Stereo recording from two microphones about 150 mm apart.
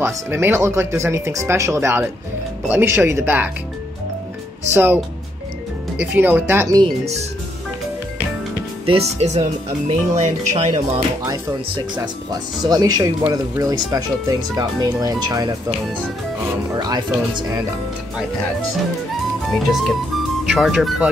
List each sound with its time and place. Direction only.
0.0 s speech: 15° right (ahead or behind)
4.7 s speech: 15° right (ahead or behind)
6.1 s speech: 15° right (ahead or behind)
8.8 s speech: 45° right (ahead or behind)
12.3 s speech: 25° right (ahead or behind)
16.7 s speech: 25° right (ahead or behind)
19.5 s speech: centre (ahead or behind)